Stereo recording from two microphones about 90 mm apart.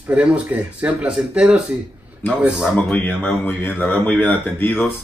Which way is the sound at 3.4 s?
20° left (ahead or behind).